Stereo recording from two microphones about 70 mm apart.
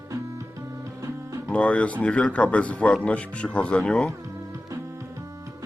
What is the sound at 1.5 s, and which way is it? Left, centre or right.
Speech, centre.